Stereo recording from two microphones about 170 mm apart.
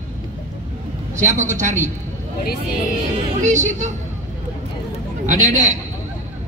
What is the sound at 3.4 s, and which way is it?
Speech, 45° right (ahead or behind).